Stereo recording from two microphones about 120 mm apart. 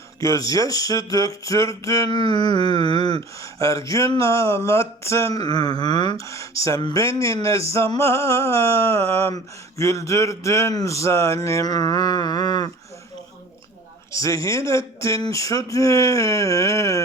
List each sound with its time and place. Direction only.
0.2 s speech: 30° left (ahead or behind)
5.4 s speech: 35° left (ahead or behind)
6.1 s speech: 25° left (ahead or behind)
14.1 s speech: 25° left (ahead or behind)